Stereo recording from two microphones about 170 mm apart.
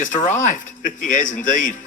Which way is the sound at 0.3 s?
50° left (ahead or behind).